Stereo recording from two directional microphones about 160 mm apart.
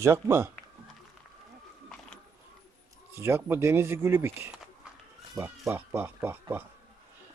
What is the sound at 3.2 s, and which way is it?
Speech, 15° right (ahead or behind).